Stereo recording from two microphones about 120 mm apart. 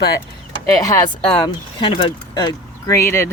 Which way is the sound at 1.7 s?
40° left (ahead or behind).